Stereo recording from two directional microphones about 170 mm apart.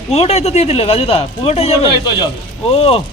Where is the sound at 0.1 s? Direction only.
40° left (ahead or behind).